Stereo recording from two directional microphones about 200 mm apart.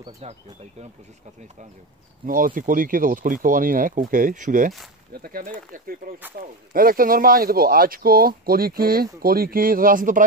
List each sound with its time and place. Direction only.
0.0 s speech: 35° right (ahead or behind)
2.2 s speech: 45° right (ahead or behind)